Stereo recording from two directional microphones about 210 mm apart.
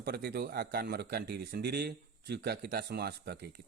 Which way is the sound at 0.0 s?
50° right (ahead or behind).